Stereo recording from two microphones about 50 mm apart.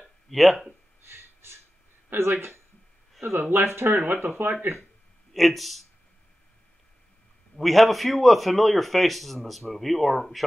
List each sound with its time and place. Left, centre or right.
0.3 s a man's voice: centre
1.0 s a sound: right
2.3 s speech: right
5.3 s a man's voice: centre
7.5 s a man's voice: centre